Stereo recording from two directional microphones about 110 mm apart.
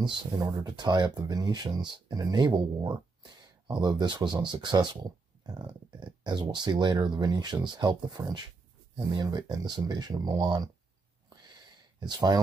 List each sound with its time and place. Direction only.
0.0 s speech: 45° right (ahead or behind)
12.0 s speech: 40° right (ahead or behind)